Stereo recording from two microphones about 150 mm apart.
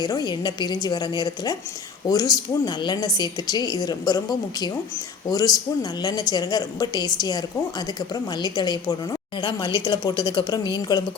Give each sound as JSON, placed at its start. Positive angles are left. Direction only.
{"t": 0.0, "sound": "a woman's voice", "side_deg": 25}